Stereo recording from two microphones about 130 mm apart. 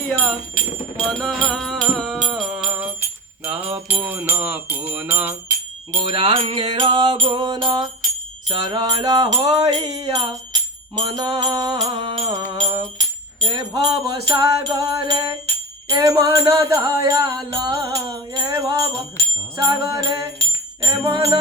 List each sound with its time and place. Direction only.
0.2 s music: 10° left (ahead or behind); by 5.3 s 15° right (ahead or behind)
6.1 s music: 40° right (ahead or behind)